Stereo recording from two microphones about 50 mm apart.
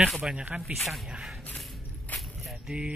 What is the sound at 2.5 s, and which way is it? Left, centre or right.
Mechanisms, right.